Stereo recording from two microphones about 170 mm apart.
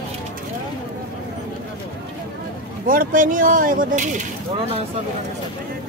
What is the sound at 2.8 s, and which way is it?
Speech, 55° right (ahead or behind).